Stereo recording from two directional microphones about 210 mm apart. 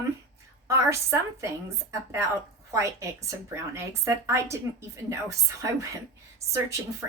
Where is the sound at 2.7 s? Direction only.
15° right (ahead or behind).